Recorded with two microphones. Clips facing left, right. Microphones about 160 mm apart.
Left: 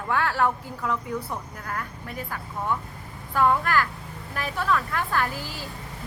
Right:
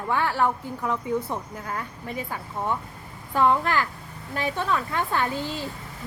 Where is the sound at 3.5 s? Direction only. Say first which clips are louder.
Even; 20° right (ahead or behind).